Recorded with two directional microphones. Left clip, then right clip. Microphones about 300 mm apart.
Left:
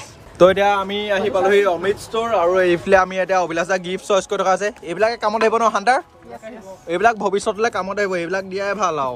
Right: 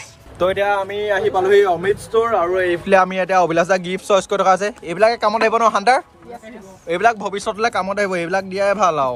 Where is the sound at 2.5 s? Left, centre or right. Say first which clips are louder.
Left 2 dB; centre.